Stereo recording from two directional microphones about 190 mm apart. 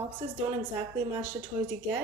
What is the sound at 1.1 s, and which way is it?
Speech, 15° right (ahead or behind).